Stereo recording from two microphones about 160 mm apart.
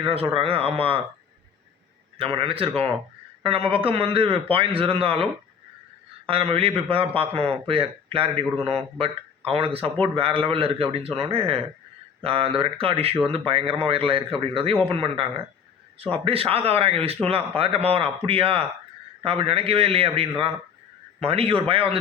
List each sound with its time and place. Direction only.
0.3 s a man's voice: 35° right (ahead or behind)
2.1 s a man's voice: 35° right (ahead or behind)